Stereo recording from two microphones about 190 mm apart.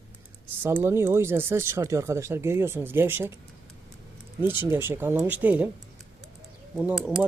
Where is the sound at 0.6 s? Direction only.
10° right (ahead or behind).